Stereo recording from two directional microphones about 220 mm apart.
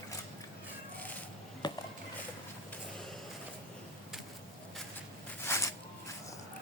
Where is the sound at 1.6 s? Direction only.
20° left (ahead or behind).